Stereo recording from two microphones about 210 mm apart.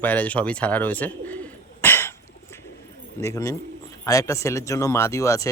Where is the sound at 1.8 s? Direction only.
10° left (ahead or behind).